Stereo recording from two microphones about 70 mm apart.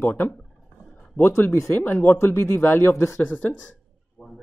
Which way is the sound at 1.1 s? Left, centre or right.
Left.